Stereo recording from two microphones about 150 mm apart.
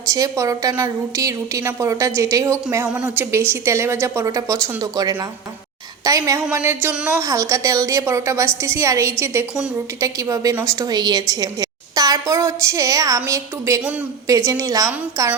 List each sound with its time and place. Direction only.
0.1 s a woman's voice: 20° right (ahead or behind)